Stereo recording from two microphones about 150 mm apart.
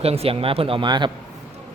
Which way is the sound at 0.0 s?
40° right (ahead or behind).